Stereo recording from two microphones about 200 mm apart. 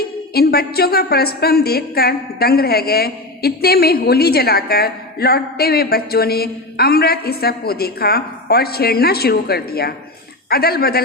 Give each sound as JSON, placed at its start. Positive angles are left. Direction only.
{"t": 0.3, "sound": "a woman's voice", "side_deg": 50}